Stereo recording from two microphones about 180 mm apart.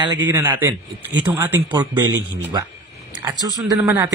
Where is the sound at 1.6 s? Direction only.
25° right (ahead or behind).